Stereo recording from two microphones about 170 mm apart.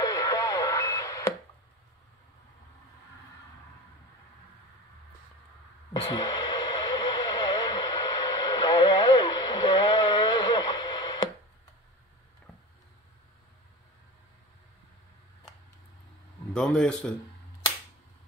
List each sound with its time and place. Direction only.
0.0 s radio: 20° left (ahead or behind)
6.0 s a sound: 25° left (ahead or behind)
16.5 s a man's voice: 5° left (ahead or behind)